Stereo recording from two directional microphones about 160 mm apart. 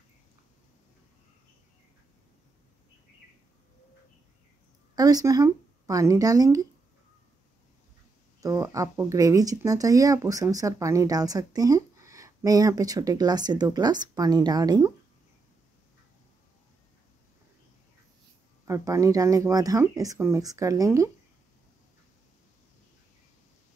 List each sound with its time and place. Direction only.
4.9 s speech: 25° right (ahead or behind)
8.4 s speech: 20° right (ahead or behind)
18.7 s speech: 20° right (ahead or behind)